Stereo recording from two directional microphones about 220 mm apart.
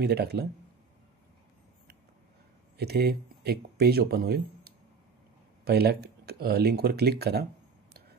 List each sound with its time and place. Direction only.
0.0 s speech: 45° right (ahead or behind)
2.8 s speech: 45° right (ahead or behind)